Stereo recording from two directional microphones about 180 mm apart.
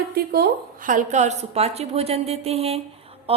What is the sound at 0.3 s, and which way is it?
A woman's voice, 55° right (ahead or behind).